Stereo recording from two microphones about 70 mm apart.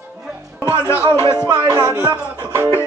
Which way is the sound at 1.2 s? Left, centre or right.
Left.